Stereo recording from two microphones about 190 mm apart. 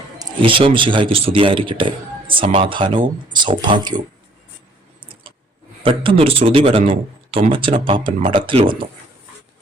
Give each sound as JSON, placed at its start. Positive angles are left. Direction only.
{"t": 0.2, "sound": "a man's voice", "side_deg": -25}
{"t": 5.8, "sound": "a man's voice", "side_deg": -25}